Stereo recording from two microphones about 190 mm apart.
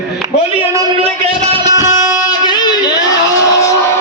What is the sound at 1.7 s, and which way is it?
Music, 15° right (ahead or behind).